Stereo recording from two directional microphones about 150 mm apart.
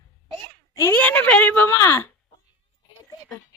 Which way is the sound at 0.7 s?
10° left (ahead or behind).